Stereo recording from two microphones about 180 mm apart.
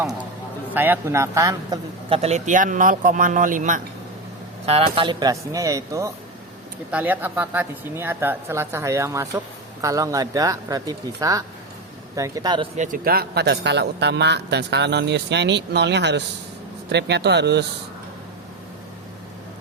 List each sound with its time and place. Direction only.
0.7 s a woman's voice: 10° right (ahead or behind)
2.0 s speech: 35° right (ahead or behind)
4.6 s speech: 35° right (ahead or behind)
4.9 s a woman's voice: 25° right (ahead or behind)
12.7 s a man's voice: 45° right (ahead or behind); by 17.7 s 70° right (ahead or behind)